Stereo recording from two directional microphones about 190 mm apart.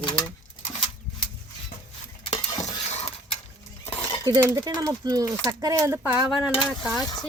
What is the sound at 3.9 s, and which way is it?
Cutlery, 20° left (ahead or behind).